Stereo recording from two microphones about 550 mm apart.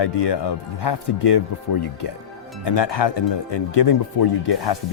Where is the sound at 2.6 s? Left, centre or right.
Left.